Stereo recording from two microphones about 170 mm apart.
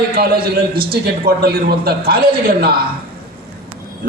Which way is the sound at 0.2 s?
65° right (ahead or behind).